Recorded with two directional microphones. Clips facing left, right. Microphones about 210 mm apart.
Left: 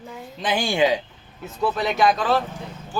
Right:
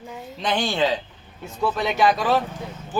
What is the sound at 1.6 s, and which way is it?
Speech, centre (ahead or behind).